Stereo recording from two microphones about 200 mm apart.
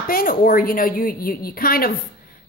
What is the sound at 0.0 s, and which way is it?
A woman's voice, 45° left (ahead or behind).